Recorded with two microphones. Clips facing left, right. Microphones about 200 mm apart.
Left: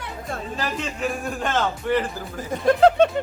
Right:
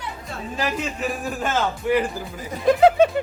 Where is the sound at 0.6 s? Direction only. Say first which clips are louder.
Right 3 dB; 5° right (ahead or behind).